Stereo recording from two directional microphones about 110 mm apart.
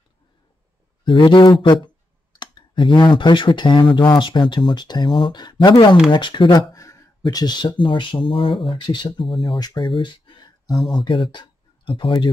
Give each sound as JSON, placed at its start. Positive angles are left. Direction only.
{"t": 1.0, "sound": "speech", "side_deg": 50}
{"t": 10.7, "sound": "speech", "side_deg": 0}
{"t": 11.0, "sound": "speech", "side_deg": 50}